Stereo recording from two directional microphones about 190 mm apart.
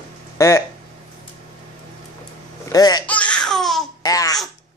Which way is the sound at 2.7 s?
20° left (ahead or behind).